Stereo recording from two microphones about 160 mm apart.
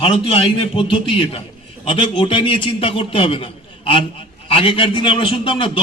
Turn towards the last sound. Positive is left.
turn(degrees=35)  # may be behind; listen again after turning